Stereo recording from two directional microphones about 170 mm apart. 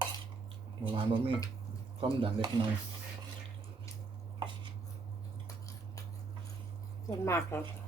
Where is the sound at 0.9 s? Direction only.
30° right (ahead or behind).